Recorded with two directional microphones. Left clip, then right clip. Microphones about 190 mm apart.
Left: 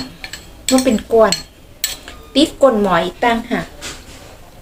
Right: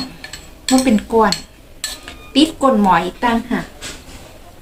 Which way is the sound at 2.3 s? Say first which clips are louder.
Left 2 dB; 20° right (ahead or behind).